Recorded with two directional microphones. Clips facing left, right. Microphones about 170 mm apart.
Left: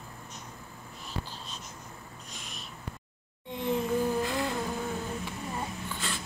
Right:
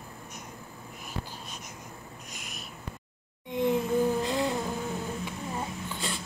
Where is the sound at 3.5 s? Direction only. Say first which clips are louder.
Right 4 dB; 15° right (ahead or behind).